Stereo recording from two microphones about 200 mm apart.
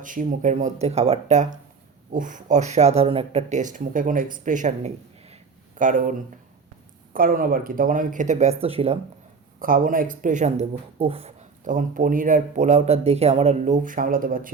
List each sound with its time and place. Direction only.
0.0 s speech: 40° right (ahead or behind)
9.6 s speech: 45° right (ahead or behind)